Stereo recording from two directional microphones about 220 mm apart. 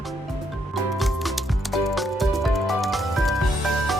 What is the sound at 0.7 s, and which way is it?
Music, centre (ahead or behind).